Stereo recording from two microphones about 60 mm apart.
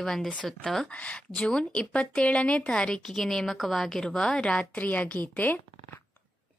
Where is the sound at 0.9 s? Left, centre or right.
Left.